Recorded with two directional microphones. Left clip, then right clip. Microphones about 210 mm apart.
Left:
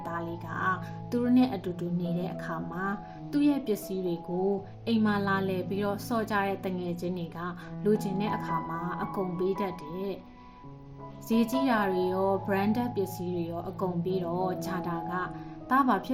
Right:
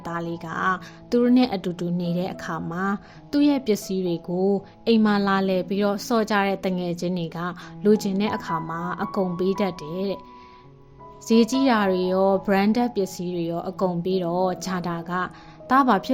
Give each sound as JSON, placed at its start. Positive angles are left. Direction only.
{"t": 0.0, "sound": "a woman's voice", "side_deg": -45}
{"t": 11.3, "sound": "a woman's voice", "side_deg": -40}